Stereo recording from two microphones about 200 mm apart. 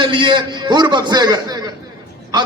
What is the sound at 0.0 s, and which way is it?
A man's voice, 25° right (ahead or behind).